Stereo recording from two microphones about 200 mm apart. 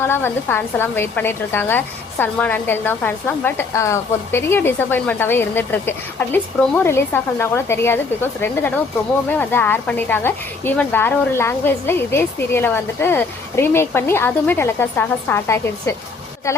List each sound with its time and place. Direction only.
0.0 s speech: 10° left (ahead or behind)